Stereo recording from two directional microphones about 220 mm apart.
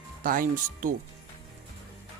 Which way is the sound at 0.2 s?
40° right (ahead or behind).